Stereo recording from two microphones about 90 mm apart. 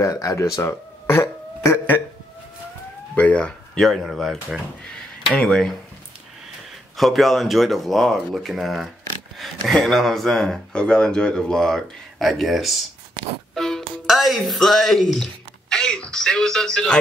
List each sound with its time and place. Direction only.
0.0 s speech: 40° left (ahead or behind)
1.2 s a sound: 30° left (ahead or behind)
3.2 s a sound: 15° left (ahead or behind)
3.8 s speech: centre (ahead or behind)
5.3 s speech: 10° left (ahead or behind)
7.0 s speech: centre (ahead or behind)
13.6 s music: 5° left (ahead or behind)
14.0 s speech: centre (ahead or behind)
15.7 s a sound: 10° left (ahead or behind)